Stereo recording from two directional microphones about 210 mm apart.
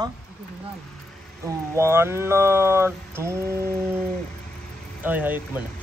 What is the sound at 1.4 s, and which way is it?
A man's voice, 10° right (ahead or behind).